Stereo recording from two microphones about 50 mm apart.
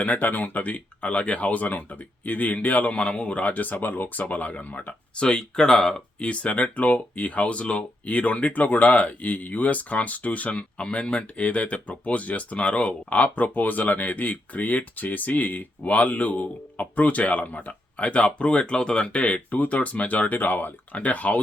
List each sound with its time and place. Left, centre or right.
0.0 s speech: left
4.2 s speech: left
5.2 s speech: centre
6.2 s speech: left